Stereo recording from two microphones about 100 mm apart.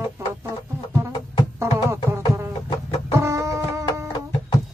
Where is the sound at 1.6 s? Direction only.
30° right (ahead or behind).